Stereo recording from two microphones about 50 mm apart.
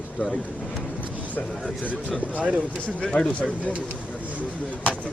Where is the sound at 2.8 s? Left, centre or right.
Left.